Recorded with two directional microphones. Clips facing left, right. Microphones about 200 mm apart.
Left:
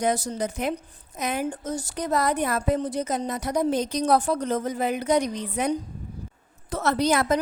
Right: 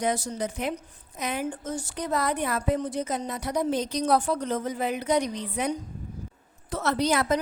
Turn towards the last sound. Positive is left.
turn(degrees=45)  # may be behind; listen again after turning